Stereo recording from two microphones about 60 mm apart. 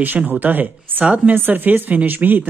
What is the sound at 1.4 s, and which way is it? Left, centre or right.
Speech, right.